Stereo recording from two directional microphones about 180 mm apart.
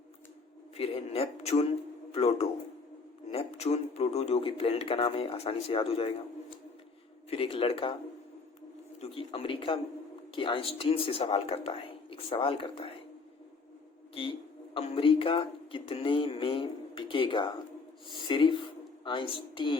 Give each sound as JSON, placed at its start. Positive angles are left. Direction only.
{"t": 0.8, "sound": "speech", "side_deg": 35}
{"t": 7.3, "sound": "speech", "side_deg": 30}
{"t": 9.0, "sound": "speech", "side_deg": 30}
{"t": 14.7, "sound": "speech", "side_deg": 30}